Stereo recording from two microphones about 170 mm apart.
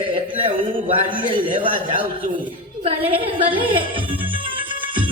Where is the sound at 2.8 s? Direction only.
30° right (ahead or behind).